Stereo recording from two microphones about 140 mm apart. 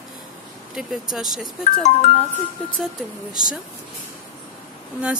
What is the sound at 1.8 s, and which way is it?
Speech, 55° left (ahead or behind).